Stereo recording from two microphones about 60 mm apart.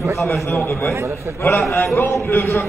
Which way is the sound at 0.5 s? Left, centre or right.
Left.